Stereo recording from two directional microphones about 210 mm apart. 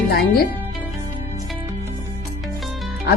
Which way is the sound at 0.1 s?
50° left (ahead or behind).